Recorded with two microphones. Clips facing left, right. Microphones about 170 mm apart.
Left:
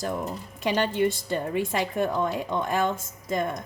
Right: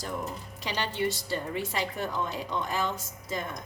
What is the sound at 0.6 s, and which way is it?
A woman's voice, 50° left (ahead or behind).